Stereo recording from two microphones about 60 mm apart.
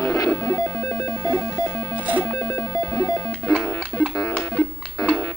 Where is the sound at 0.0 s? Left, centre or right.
Left.